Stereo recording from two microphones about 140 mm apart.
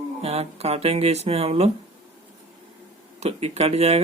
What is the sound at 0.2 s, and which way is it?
Speech, 45° right (ahead or behind).